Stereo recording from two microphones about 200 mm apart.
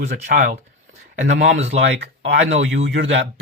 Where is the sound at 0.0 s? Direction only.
35° right (ahead or behind).